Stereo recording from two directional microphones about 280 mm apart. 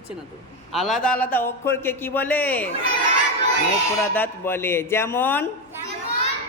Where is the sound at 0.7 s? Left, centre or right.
Centre.